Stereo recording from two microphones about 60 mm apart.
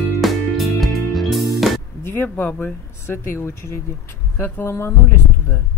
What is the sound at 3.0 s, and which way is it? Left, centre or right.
Speech, left.